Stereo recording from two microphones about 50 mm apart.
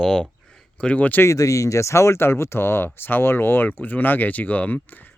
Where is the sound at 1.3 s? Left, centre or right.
Left.